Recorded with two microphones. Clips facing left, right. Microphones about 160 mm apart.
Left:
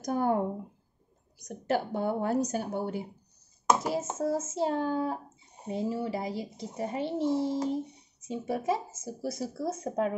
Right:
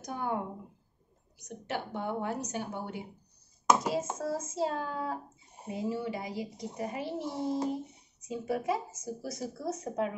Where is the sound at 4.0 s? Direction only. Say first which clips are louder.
Left 4 dB; 25° left (ahead or behind).